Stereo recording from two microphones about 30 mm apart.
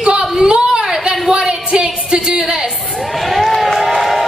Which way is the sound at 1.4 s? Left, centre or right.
Right.